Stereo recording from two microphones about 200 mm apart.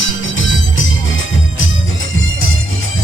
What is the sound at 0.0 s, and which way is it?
Music, 70° left (ahead or behind).